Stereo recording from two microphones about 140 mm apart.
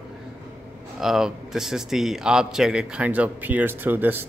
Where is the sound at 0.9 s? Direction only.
5° right (ahead or behind).